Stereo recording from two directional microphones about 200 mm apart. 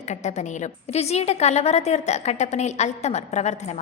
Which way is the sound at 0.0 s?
35° left (ahead or behind).